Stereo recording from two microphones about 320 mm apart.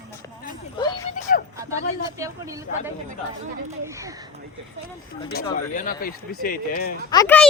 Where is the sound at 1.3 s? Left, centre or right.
Left.